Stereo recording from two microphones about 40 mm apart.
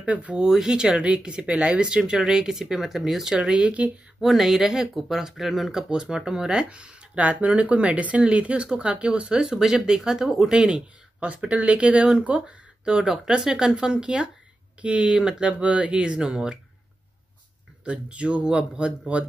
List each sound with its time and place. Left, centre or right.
0.0 s speech: right
0.4 s a man's voice: centre
2.0 s speech: centre
3.4 s a man's voice: right
4.2 s speech: centre
5.9 s speech: centre
6.7 s a man's voice: right
9.6 s speech: centre
10.5 s a man's voice: right
11.1 s a man's voice: right
17.8 s a man's voice: right